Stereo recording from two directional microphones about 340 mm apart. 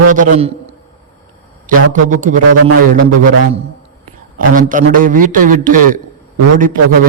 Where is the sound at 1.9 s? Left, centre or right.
Right.